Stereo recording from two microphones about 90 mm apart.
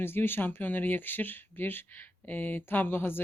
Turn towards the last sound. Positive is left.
turn(degrees=25)  # may be behind; listen again after turning